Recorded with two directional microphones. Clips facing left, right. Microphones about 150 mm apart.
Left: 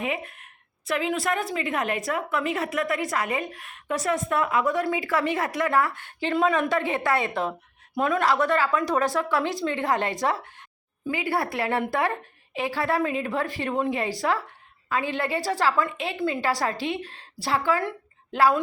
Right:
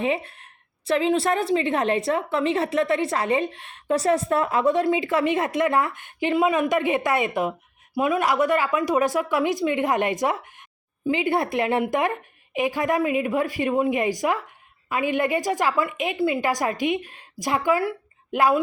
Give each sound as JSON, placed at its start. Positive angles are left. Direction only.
{"t": 0.0, "sound": "a woman's voice", "side_deg": -30}